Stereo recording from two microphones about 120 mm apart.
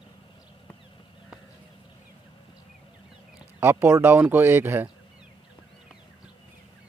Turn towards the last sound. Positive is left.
turn(degrees=-15)  # may be behind; listen again after turning